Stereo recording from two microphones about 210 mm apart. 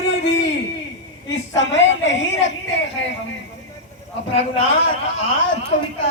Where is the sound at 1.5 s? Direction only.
60° left (ahead or behind).